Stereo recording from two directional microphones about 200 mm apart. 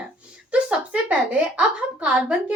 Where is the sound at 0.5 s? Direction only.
5° right (ahead or behind).